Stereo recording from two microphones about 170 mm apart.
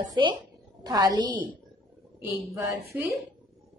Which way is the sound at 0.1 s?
25° right (ahead or behind).